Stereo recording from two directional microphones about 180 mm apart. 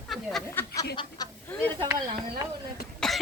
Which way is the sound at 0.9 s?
25° left (ahead or behind).